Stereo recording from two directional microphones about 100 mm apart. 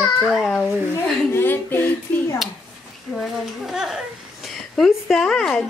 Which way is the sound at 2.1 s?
15° left (ahead or behind).